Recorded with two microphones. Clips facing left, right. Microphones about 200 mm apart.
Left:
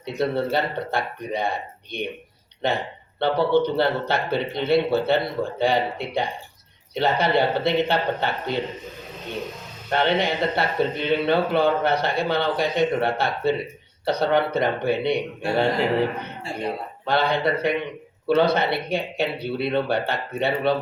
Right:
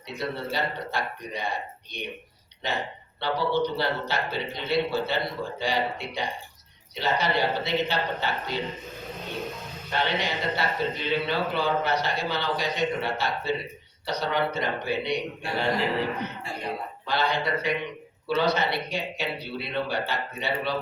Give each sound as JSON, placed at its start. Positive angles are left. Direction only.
{"t": 0.0, "sound": "a man's voice", "side_deg": 55}
{"t": 9.9, "sound": "a man's voice", "side_deg": 55}
{"t": 17.1, "sound": "a man's voice", "side_deg": 55}